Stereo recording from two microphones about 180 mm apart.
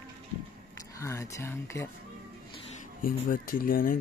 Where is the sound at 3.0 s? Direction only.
50° left (ahead or behind).